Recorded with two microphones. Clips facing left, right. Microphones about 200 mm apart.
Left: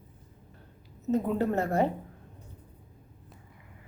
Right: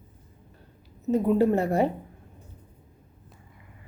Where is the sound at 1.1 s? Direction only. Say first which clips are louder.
Right 5 dB; 10° right (ahead or behind).